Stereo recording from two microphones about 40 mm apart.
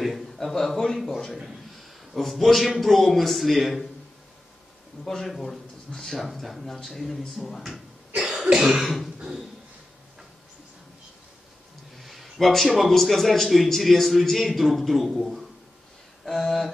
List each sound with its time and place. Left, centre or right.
0.0 s a man's voice: centre
5.0 s a man's voice: centre
8.2 s cough: centre
8.8 s a man's voice: centre
12.0 s a man's voice: centre